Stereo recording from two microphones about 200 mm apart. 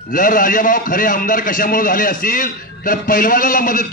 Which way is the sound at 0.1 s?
45° left (ahead or behind).